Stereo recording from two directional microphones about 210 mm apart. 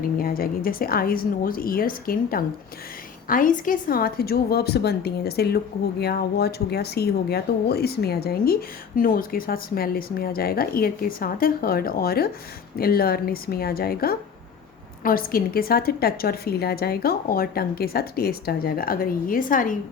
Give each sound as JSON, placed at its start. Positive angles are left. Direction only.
{"t": 0.2, "sound": "a woman's voice", "side_deg": 45}